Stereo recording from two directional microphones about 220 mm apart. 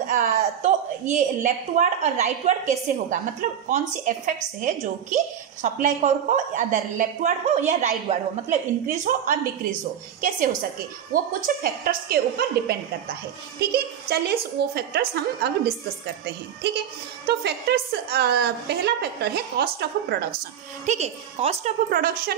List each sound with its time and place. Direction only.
0.0 s a woman's voice: 40° right (ahead or behind)
11.1 s a woman's voice: 40° right (ahead or behind)
20.8 s a woman's voice: 30° right (ahead or behind)